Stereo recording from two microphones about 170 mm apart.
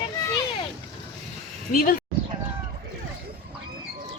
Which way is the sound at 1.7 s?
55° left (ahead or behind).